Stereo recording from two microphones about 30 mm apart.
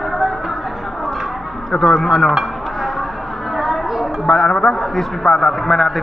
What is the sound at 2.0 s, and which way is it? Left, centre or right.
Speech, centre.